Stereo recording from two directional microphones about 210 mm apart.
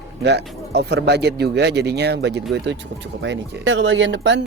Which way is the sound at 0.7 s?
50° right (ahead or behind).